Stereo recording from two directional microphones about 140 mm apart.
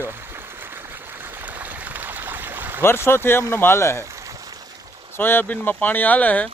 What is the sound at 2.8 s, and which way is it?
Speech, 15° left (ahead or behind).